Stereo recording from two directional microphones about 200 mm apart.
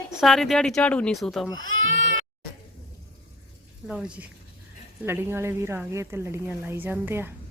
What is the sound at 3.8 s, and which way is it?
A woman's voice, 5° right (ahead or behind).